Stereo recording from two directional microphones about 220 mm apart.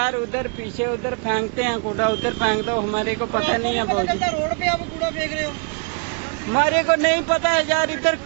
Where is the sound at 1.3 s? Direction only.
15° right (ahead or behind).